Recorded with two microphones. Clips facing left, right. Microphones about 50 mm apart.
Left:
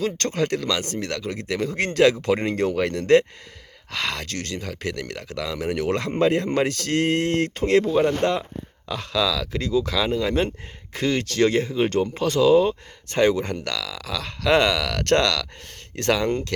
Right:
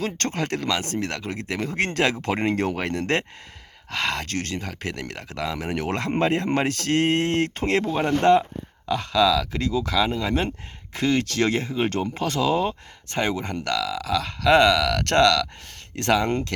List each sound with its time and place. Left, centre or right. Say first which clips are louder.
0.0 s speech: left 3 dB; right
3.9 s speech: right 2 dB; right
11.4 s speech: left 3 dB; right
13.1 s speech: left 5 dB; centre
14.5 s speech: right 2 dB; centre